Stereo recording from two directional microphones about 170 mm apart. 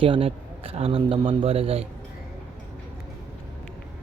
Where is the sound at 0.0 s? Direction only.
30° right (ahead or behind).